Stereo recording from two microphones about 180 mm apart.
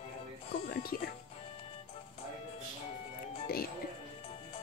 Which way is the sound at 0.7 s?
55° left (ahead or behind).